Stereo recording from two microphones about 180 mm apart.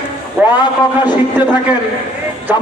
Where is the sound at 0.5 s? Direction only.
25° left (ahead or behind).